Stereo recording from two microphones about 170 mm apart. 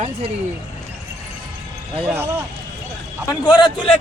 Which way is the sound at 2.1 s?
15° right (ahead or behind).